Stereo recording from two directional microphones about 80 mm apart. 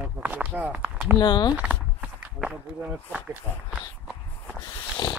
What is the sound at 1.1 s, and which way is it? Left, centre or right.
Speech, left.